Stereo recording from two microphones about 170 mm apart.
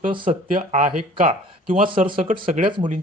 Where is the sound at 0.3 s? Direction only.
50° right (ahead or behind).